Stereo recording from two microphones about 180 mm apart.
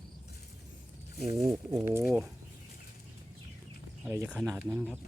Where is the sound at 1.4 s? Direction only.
20° right (ahead or behind).